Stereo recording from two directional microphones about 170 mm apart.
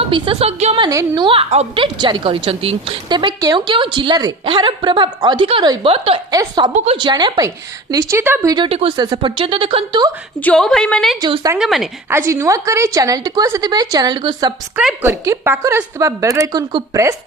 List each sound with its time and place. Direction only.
0.0 s a woman's voice: 35° right (ahead or behind)
0.9 s a woman's voice: 20° right (ahead or behind)
6.3 s a woman's voice: 20° right (ahead or behind)
8.5 s a woman's voice: 30° right (ahead or behind)
10.4 s a woman's voice: 5° left (ahead or behind)
11.2 s a woman's voice: 25° right (ahead or behind)
11.5 s a woman's voice: centre (ahead or behind)
12.0 s a woman's voice: 15° right (ahead or behind)
14.8 s a woman's voice: 5° right (ahead or behind)
15.1 s a woman's voice: 15° right (ahead or behind)